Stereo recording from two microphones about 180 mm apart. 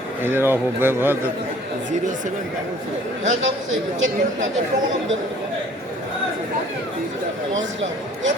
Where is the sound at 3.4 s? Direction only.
90° right.